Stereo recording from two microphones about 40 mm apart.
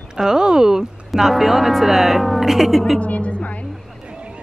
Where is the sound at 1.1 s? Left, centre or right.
Centre.